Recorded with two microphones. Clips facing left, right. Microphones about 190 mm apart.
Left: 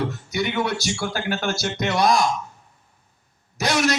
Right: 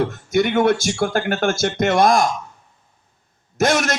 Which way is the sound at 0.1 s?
50° right (ahead or behind).